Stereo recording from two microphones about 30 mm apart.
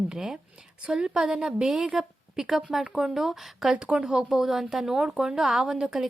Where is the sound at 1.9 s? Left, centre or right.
Centre.